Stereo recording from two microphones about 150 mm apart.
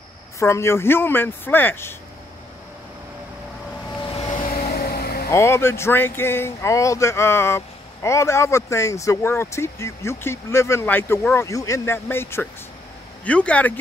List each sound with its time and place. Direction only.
0.4 s speech: 20° left (ahead or behind)
4.7 s vehicle: 90° left
5.3 s speech: 20° left (ahead or behind)